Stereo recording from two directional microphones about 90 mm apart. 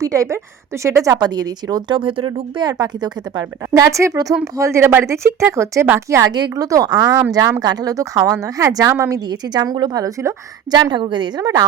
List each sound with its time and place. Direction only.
0.0 s speech: 35° right (ahead or behind)
1.0 s a woman's voice: 45° right (ahead or behind)
2.0 s speech: 75° right (ahead or behind)
2.6 s a woman's voice: 45° right (ahead or behind)
3.8 s speech: 35° right (ahead or behind)
6.3 s a woman's voice: 50° right (ahead or behind)
10.7 s a woman's voice: 55° right (ahead or behind)